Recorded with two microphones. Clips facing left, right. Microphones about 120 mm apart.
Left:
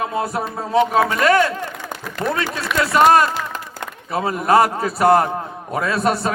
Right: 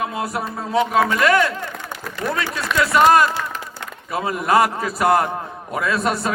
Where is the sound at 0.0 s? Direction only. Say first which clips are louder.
Left 2 dB; 30° left (ahead or behind).